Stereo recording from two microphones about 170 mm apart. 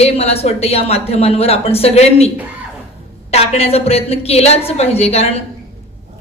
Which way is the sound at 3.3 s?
35° left (ahead or behind).